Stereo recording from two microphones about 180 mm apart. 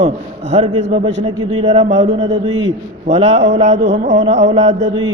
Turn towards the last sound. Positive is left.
turn(degrees=-40)  # may be behind; listen again after turning